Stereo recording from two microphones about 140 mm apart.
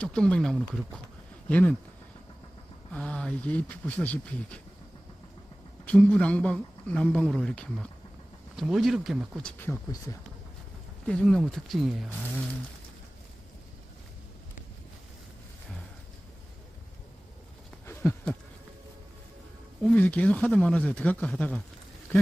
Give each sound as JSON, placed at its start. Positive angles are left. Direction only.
{"t": 0.0, "sound": "speech", "side_deg": 5}
{"t": 2.9, "sound": "speech", "side_deg": 5}
{"t": 5.9, "sound": "speech", "side_deg": 10}
{"t": 9.4, "sound": "speech", "side_deg": 10}
{"t": 11.1, "sound": "speech", "side_deg": 5}
{"t": 17.8, "sound": "a sound", "side_deg": 15}
{"t": 19.8, "sound": "speech", "side_deg": 5}
{"t": 22.1, "sound": "a sound", "side_deg": 10}